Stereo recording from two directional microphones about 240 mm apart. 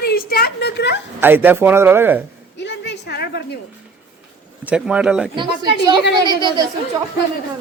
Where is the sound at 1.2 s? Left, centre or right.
Centre.